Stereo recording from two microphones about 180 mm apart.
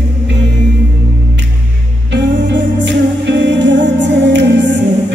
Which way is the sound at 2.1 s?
80° right.